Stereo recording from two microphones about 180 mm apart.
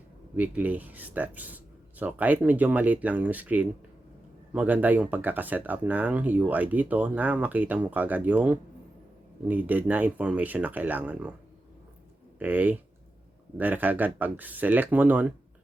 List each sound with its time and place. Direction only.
0.3 s speech: 10° right (ahead or behind)
12.4 s speech: 10° right (ahead or behind)